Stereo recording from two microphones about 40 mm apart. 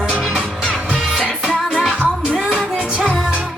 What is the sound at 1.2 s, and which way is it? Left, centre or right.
Music, right.